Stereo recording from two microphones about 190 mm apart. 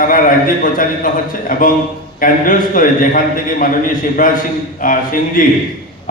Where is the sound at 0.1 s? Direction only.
45° left (ahead or behind).